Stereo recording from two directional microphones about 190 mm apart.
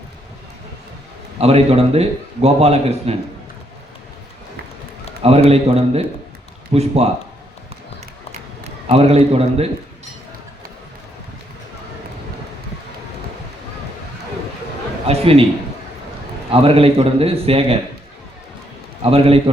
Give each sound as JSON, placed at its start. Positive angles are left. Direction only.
{"t": 1.4, "sound": "a man's voice", "side_deg": -30}
{"t": 5.5, "sound": "a man's voice", "side_deg": -35}
{"t": 8.9, "sound": "a man's voice", "side_deg": -35}
{"t": 15.0, "sound": "a man's voice", "side_deg": -30}
{"t": 16.5, "sound": "a man's voice", "side_deg": -30}
{"t": 19.1, "sound": "a man's voice", "side_deg": -30}